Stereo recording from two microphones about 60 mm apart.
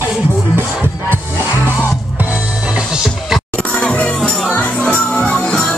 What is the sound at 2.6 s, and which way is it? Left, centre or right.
Music, centre.